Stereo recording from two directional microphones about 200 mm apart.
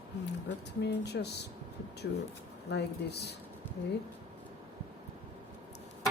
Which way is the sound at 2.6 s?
55° left (ahead or behind).